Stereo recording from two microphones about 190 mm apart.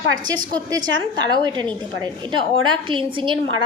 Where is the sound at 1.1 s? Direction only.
20° right (ahead or behind).